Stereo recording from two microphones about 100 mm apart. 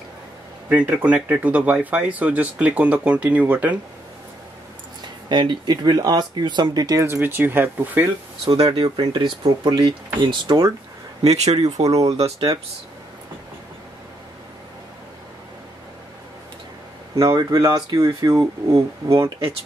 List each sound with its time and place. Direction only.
0.7 s speech: 15° right (ahead or behind)
5.3 s speech: 50° right (ahead or behind)
7.1 s speech: 20° right (ahead or behind)
8.5 s speech: 55° right (ahead or behind)
11.2 s speech: 90° right
11.6 s speech: 35° right (ahead or behind)
17.1 s speech: 40° right (ahead or behind)